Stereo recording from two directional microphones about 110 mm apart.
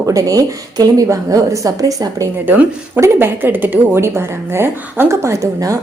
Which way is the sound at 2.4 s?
20° right (ahead or behind).